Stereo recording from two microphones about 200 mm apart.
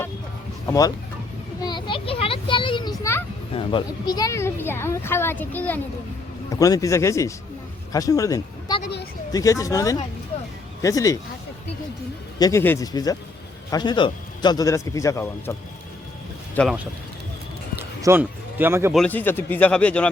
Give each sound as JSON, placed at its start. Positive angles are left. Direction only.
{"t": 0.7, "sound": "speech", "side_deg": 15}
{"t": 1.6, "sound": "children playing", "side_deg": 25}
{"t": 3.0, "sound": "children playing", "side_deg": 15}
{"t": 3.5, "sound": "speech", "side_deg": 25}
{"t": 8.8, "sound": "a sound", "side_deg": 55}
{"t": 9.3, "sound": "speech", "side_deg": 15}
{"t": 12.4, "sound": "speech", "side_deg": 15}
{"t": 16.6, "sound": "speech", "side_deg": 0}
{"t": 17.7, "sound": "a sound", "side_deg": -10}
{"t": 18.9, "sound": "speech", "side_deg": 10}